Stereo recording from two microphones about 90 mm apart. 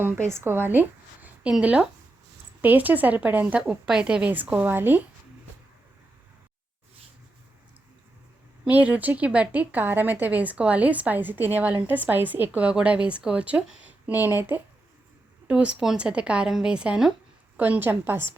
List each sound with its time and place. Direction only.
0.0 s speech: 25° right (ahead or behind)
1.5 s a woman's voice: 15° right (ahead or behind)
8.6 s a woman's voice: 15° right (ahead or behind)
17.6 s speech: 20° right (ahead or behind)